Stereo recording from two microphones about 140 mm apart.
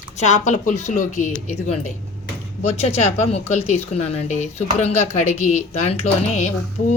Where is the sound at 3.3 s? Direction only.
50° left (ahead or behind).